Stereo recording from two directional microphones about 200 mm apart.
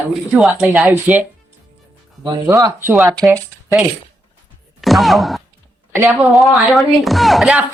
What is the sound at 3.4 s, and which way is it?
A woman's voice, centre (ahead or behind).